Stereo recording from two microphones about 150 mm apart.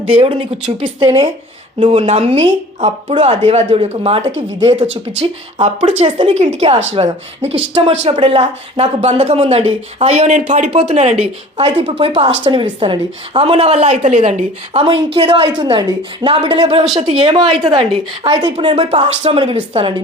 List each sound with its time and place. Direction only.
0.0 s a woman's voice: 35° right (ahead or behind); by 10.7 s 55° right (ahead or behind)
10.7 s a woman's voice: 40° right (ahead or behind)